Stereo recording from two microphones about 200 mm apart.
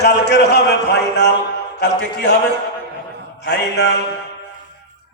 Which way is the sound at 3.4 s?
55° left (ahead or behind).